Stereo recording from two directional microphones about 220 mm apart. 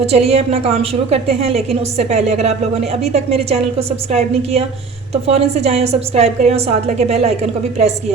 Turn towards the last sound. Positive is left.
turn(degrees=-30)  # may be behind; listen again after turning